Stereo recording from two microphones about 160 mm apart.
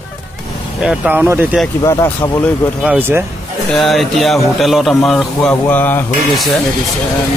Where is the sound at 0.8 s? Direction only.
5° right (ahead or behind).